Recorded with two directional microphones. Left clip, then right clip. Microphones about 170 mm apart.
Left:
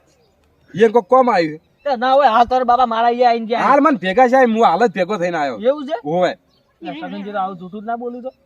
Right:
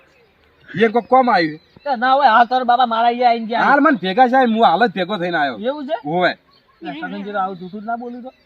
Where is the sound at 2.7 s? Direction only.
10° left (ahead or behind).